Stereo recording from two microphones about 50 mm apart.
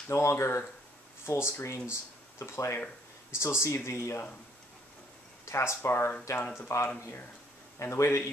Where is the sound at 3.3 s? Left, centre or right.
Left.